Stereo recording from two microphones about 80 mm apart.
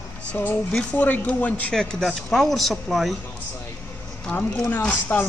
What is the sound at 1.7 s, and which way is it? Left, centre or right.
Speech, centre.